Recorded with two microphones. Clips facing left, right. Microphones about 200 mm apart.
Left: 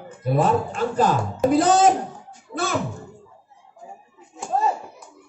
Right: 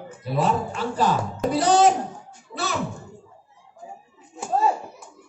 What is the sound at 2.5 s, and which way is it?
Music, 50° left (ahead or behind).